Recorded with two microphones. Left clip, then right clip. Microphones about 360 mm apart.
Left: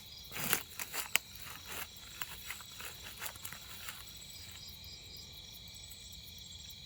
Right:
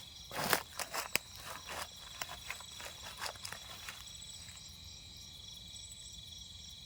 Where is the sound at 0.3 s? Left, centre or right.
Centre.